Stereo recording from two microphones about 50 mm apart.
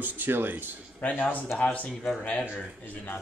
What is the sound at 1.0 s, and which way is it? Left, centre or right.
Speech, left.